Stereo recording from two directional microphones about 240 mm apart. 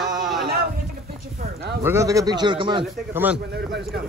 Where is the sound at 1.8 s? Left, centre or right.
Centre.